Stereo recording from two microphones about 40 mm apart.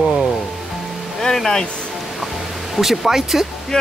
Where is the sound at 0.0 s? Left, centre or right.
Centre.